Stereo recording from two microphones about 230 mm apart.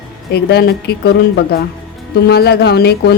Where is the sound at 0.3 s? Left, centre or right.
Left.